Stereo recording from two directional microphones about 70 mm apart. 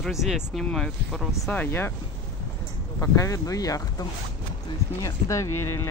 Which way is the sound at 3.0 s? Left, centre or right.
Left.